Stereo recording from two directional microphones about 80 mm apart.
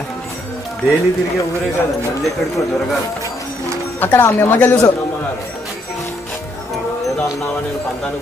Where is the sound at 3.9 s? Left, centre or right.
Left.